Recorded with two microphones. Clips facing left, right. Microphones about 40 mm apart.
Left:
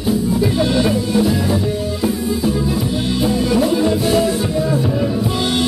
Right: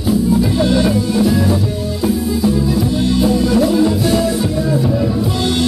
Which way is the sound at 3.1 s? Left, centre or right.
Centre.